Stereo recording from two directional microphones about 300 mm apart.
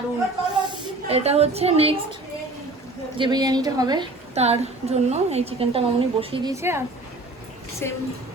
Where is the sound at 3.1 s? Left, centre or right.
Centre.